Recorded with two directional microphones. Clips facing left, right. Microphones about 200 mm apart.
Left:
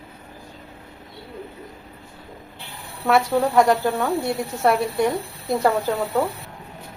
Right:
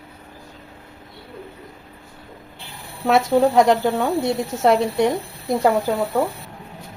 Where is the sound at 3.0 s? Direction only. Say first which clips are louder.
Right 3 dB; 20° right (ahead or behind).